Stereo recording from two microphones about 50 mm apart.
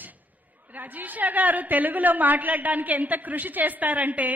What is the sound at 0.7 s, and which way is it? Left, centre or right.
A woman's voice, right.